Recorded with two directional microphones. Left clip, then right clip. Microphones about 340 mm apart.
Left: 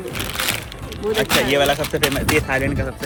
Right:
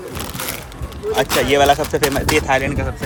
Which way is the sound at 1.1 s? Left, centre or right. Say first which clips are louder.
Right 2 dB; centre.